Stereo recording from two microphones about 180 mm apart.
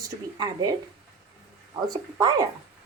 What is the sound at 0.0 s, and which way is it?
Speech, 20° right (ahead or behind).